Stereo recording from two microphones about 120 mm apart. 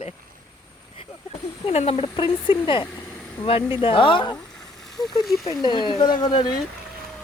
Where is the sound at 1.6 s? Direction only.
55° left (ahead or behind); by 4.4 s 40° left (ahead or behind).